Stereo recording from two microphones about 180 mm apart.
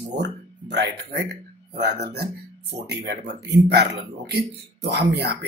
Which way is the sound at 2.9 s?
70° right (ahead or behind).